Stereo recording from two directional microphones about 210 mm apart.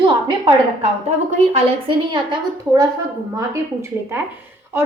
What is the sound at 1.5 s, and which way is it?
A woman's voice, 25° right (ahead or behind).